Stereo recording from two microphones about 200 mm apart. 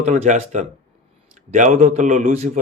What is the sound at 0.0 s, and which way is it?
Speech, 35° right (ahead or behind).